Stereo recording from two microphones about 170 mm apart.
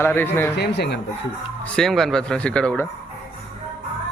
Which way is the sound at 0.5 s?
80° left.